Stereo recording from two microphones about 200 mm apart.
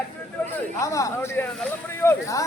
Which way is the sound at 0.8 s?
15° left (ahead or behind).